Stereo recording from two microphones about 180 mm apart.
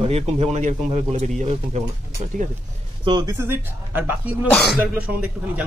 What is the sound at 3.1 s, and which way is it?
Speech, 25° right (ahead or behind).